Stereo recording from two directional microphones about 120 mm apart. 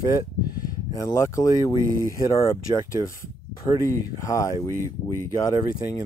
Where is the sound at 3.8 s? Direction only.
25° left (ahead or behind).